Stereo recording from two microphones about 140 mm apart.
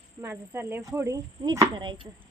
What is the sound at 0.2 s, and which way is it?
Speech, 15° right (ahead or behind).